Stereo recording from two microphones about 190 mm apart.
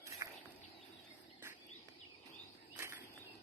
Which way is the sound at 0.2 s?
15° right (ahead or behind).